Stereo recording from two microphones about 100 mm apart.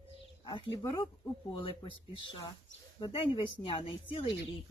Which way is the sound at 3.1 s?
60° left (ahead or behind).